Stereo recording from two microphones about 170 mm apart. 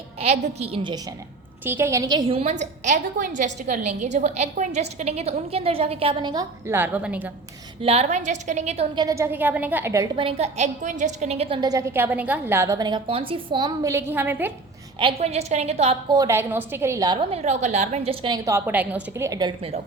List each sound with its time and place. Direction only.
0.2 s a woman's voice: 35° right (ahead or behind)
1.6 s a woman's voice: 15° right (ahead or behind)
7.8 s a woman's voice: 35° right (ahead or behind)
9.0 s a woman's voice: 15° right (ahead or behind)
10.2 s a woman's voice: 35° right (ahead or behind)
13.9 s a woman's voice: 10° right (ahead or behind)
14.9 s a woman's voice: 35° right (ahead or behind)
16.1 s a woman's voice: 15° right (ahead or behind)
17.2 s a woman's voice: 40° right (ahead or behind)
18.4 s a woman's voice: 15° right (ahead or behind); by 19.8 s 30° right (ahead or behind)